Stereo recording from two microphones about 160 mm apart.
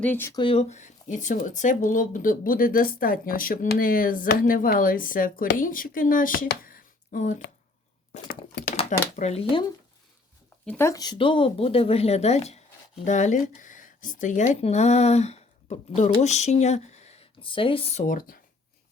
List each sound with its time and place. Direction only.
0.0 s speech: 15° left (ahead or behind)
0.3 s speech: 35° left (ahead or behind); by 7.4 s 55° left (ahead or behind)
8.7 s speech: 45° left (ahead or behind)
10.7 s speech: 15° left (ahead or behind); by 18.0 s 35° left (ahead or behind)
18.0 s speech: 55° left (ahead or behind)